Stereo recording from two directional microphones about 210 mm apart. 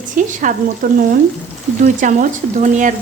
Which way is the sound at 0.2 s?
40° right (ahead or behind).